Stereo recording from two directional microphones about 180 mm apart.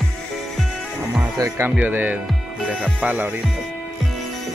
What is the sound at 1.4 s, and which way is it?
Speech, 10° right (ahead or behind).